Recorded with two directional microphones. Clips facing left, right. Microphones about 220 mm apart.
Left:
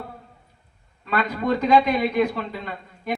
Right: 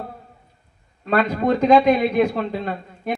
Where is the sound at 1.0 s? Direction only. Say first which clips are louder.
Right 5 dB; 45° right (ahead or behind).